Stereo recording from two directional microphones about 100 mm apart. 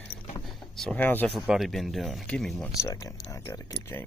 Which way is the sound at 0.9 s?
15° left (ahead or behind).